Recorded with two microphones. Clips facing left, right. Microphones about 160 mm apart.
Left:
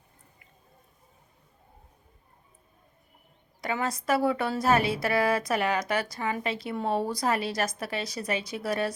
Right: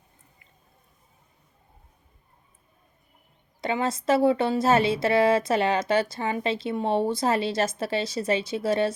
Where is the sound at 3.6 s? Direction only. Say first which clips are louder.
Right 4 dB; 25° right (ahead or behind).